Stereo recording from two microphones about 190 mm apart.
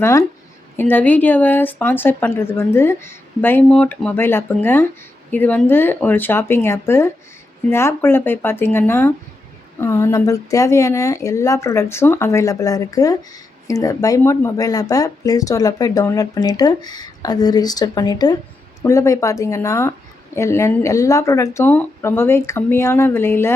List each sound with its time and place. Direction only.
0.0 s speech: 15° left (ahead or behind)